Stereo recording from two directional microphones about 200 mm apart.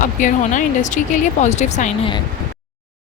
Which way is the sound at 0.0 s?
40° left (ahead or behind).